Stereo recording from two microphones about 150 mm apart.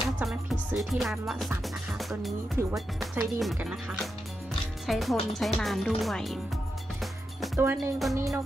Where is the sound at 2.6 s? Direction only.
15° right (ahead or behind).